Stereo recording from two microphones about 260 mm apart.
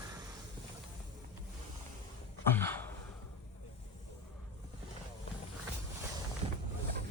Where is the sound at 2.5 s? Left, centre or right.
Centre.